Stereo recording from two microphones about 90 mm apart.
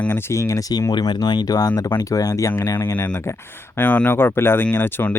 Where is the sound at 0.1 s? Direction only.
30° left (ahead or behind).